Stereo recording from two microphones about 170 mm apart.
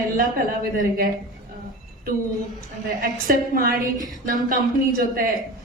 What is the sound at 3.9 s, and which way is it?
Speech, 20° right (ahead or behind).